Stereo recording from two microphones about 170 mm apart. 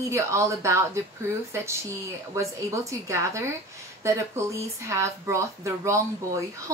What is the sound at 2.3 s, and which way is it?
Speech, 15° right (ahead or behind).